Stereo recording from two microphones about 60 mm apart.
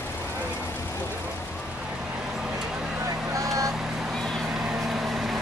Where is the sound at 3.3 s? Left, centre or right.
Right.